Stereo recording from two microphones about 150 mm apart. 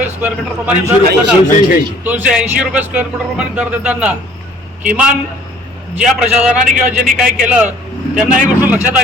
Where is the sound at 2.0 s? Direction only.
5° right (ahead or behind).